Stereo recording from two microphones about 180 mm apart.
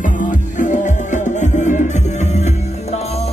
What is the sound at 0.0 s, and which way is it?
Music, 45° left (ahead or behind).